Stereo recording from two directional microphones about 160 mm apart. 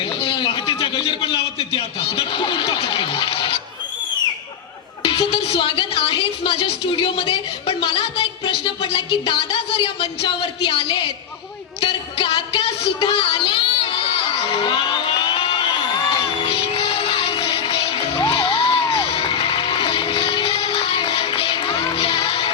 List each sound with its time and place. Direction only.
0.2 s a sound: 35° left (ahead or behind)
5.0 s speech: 35° left (ahead or behind)
11.8 s child singing: 35° left (ahead or behind)
16.1 s music: 35° left (ahead or behind)